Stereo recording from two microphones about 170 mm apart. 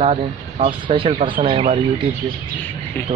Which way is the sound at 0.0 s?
40° right (ahead or behind).